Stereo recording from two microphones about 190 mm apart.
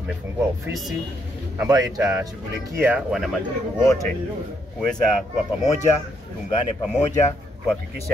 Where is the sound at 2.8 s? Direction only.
5° right (ahead or behind).